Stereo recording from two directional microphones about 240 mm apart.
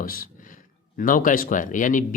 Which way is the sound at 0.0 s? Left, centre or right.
Left.